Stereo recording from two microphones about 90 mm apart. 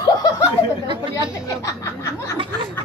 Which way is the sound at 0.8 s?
60° right (ahead or behind).